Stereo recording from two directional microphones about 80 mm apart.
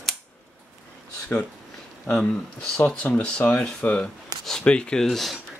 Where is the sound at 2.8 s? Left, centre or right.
Left.